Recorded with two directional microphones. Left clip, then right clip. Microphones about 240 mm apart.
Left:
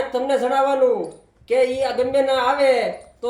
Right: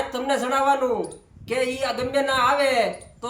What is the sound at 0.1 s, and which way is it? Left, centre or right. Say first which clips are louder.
Speech: left 5 dB; right.